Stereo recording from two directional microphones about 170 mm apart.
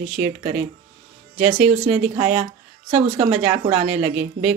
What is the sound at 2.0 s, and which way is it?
Speech, 40° right (ahead or behind).